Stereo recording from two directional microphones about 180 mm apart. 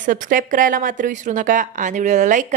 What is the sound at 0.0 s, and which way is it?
A woman's voice, 45° right (ahead or behind).